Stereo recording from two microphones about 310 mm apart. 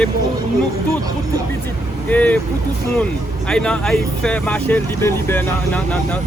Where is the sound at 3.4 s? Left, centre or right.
Centre.